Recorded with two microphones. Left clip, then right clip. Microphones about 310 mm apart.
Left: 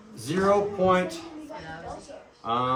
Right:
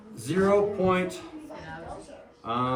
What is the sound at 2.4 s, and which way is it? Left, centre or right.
Speech, centre.